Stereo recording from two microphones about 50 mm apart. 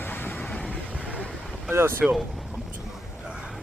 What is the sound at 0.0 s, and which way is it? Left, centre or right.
Vehicle, left.